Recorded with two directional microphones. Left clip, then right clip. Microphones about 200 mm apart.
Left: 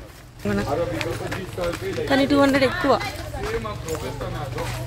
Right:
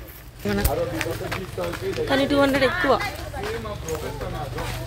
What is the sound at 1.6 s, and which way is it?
Speech, 35° left (ahead or behind).